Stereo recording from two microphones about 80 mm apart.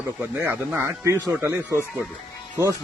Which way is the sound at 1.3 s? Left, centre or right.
Right.